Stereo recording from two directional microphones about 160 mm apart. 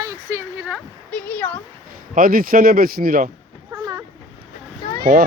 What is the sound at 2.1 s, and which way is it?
Speech, 60° right (ahead or behind).